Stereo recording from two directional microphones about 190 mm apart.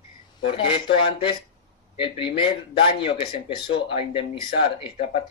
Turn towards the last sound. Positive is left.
turn(degrees=25)  # may be behind; listen again after turning